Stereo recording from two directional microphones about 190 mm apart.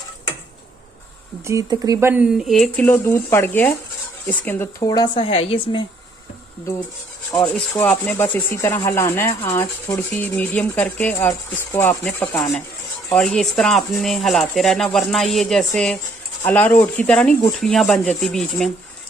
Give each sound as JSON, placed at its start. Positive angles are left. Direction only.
{"t": 1.5, "sound": "speech", "side_deg": -15}
{"t": 7.4, "sound": "speech", "side_deg": 5}